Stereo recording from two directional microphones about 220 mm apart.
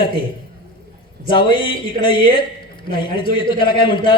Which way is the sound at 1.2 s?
20° left (ahead or behind).